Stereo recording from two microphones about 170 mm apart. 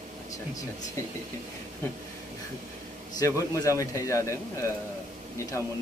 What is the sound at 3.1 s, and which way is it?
Speech, 20° left (ahead or behind).